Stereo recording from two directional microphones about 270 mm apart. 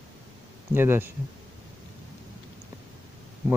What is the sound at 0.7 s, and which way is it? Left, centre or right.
Speech, centre.